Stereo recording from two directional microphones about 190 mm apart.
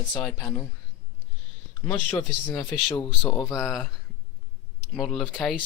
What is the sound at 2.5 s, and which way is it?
Speech, 20° left (ahead or behind).